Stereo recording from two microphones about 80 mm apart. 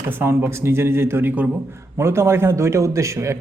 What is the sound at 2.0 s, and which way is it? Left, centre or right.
A man's voice, right.